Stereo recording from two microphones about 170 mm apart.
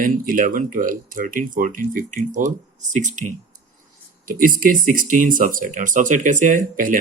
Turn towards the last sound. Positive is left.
turn(degrees=-50)  # may be behind; listen again after turning